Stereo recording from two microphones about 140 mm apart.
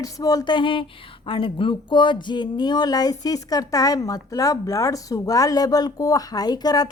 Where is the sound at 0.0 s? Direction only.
25° left (ahead or behind).